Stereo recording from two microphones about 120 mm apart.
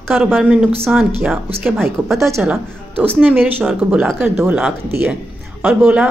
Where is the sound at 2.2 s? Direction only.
25° right (ahead or behind).